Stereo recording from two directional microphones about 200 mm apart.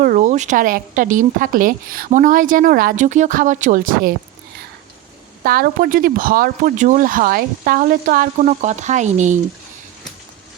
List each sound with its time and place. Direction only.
0.0 s a woman's voice: 40° right (ahead or behind)
5.4 s speech: 45° right (ahead or behind)